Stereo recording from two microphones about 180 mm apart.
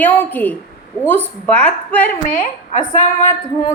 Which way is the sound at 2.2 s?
45° left (ahead or behind).